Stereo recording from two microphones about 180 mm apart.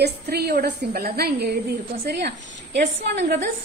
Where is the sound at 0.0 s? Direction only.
60° right (ahead or behind).